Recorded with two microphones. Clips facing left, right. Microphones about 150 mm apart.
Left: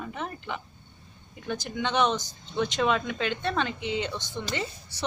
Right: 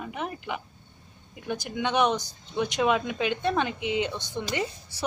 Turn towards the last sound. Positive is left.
turn(degrees=-15)  # may be behind; listen again after turning